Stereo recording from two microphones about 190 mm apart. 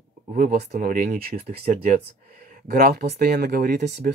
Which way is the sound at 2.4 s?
50° right (ahead or behind).